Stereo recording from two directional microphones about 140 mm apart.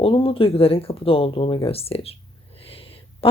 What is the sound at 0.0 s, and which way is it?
A woman's voice, 40° left (ahead or behind).